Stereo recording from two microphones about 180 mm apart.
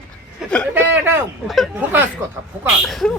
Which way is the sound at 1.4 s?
Centre (ahead or behind).